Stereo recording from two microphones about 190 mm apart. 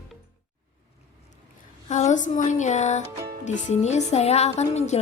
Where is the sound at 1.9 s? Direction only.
40° left (ahead or behind).